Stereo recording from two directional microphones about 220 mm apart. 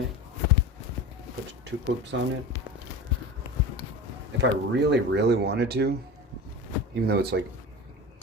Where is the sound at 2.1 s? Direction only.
55° right (ahead or behind).